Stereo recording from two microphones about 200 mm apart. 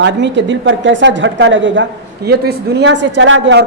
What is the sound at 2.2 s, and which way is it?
A man's voice, 55° right (ahead or behind).